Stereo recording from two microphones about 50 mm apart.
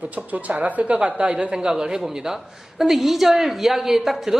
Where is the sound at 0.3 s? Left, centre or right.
Right.